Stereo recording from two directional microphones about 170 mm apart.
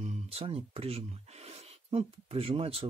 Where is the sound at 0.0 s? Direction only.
40° right (ahead or behind).